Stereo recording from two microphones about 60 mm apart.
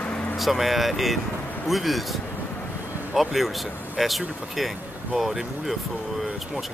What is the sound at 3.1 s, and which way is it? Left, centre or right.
Speech, centre.